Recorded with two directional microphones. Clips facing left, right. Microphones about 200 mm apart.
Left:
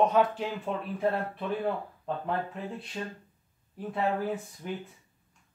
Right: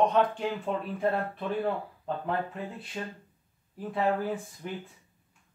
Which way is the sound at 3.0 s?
Centre (ahead or behind).